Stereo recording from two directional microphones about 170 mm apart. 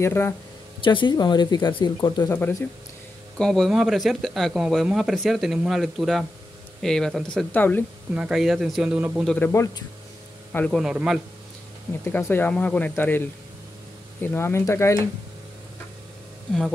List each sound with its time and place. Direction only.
0.0 s speech: 15° left (ahead or behind)
0.8 s speech: 30° left (ahead or behind)
3.3 s speech: 5° left (ahead or behind)
8.1 s speech: 5° right (ahead or behind)
9.3 s a man's voice: 15° left (ahead or behind)
10.8 s speech: 5° right (ahead or behind)
12.0 s speech: 10° left (ahead or behind)